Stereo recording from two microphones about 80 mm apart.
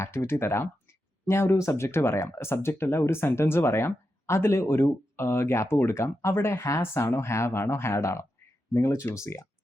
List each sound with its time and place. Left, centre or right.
0.0 s speech: left